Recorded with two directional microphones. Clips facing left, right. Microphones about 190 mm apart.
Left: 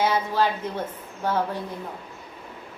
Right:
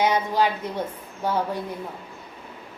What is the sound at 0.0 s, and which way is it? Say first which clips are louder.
A woman's voice: right 1 dB; 15° right (ahead or behind).